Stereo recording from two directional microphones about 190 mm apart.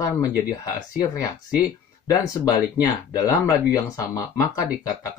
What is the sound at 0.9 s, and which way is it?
Speech, 20° left (ahead or behind).